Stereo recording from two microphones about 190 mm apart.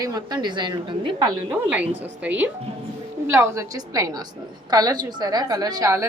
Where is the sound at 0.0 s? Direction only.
20° right (ahead or behind).